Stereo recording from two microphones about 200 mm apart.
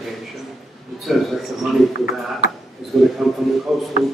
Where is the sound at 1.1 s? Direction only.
Centre (ahead or behind).